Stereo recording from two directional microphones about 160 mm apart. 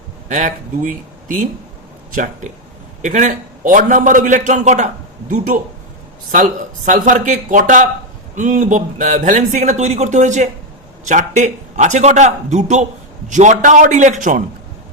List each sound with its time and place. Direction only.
0.3 s a man's voice: 55° right (ahead or behind)
2.1 s a man's voice: 55° right (ahead or behind)